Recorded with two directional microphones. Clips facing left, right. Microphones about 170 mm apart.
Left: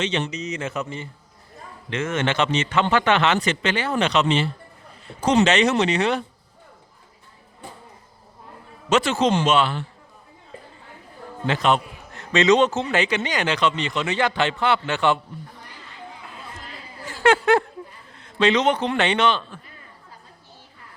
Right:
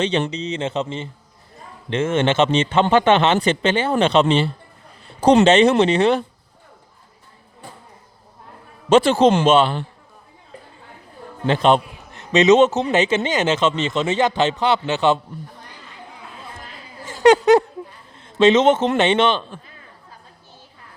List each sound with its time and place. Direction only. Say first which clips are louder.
0.0 s a man's voice: right 4 dB; 30° right (ahead or behind)
8.9 s a man's voice: right 6 dB; 30° right (ahead or behind)
11.4 s a man's voice: right 5 dB; 30° right (ahead or behind)
17.2 s a sound: right 5 dB; 20° right (ahead or behind)
18.9 s a man's voice: right 4 dB; 25° right (ahead or behind)